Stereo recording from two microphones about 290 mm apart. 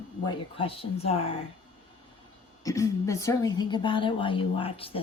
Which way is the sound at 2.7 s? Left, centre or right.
Centre.